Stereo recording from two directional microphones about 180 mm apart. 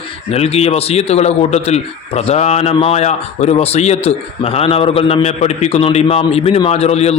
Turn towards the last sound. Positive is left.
turn(degrees=35)  # may be behind; listen again after turning